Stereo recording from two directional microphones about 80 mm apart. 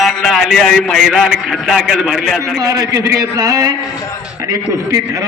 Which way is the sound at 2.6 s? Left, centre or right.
Right.